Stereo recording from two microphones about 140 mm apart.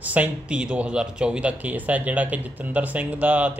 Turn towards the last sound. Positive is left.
turn(degrees=-10)  # may be behind; listen again after turning